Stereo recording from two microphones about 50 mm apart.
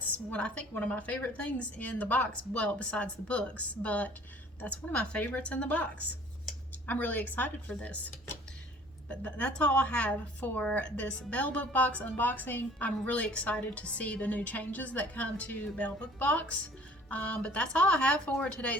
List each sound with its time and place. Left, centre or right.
0.1 s a woman's voice: left
7.7 s a woman's voice: left